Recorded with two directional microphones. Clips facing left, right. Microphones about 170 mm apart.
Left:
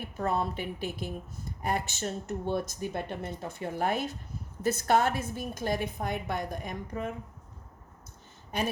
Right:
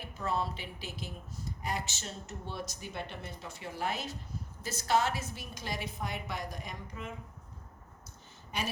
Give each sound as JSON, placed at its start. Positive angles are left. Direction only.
{"t": 0.0, "sound": "a woman's voice", "side_deg": 55}